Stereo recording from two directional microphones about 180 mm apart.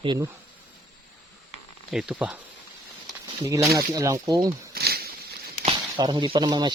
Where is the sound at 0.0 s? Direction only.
25° right (ahead or behind).